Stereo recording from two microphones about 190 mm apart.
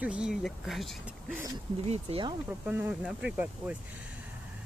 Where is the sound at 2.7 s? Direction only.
10° right (ahead or behind).